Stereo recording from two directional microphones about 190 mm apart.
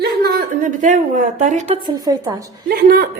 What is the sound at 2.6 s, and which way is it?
Speech, 55° right (ahead or behind).